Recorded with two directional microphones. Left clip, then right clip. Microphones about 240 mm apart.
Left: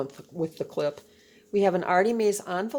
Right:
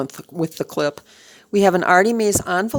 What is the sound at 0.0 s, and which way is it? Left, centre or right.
Speech, right.